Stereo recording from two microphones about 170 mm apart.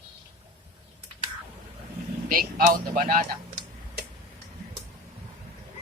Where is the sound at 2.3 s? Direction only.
60° right (ahead or behind).